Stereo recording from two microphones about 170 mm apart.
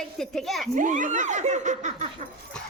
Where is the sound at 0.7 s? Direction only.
50° right (ahead or behind).